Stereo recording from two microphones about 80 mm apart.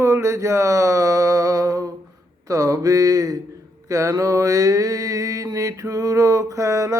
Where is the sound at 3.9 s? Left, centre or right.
Right.